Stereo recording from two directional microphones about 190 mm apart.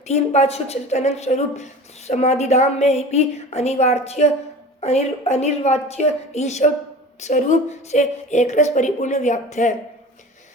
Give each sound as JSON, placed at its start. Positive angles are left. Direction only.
{"t": 0.1, "sound": "speech", "side_deg": 35}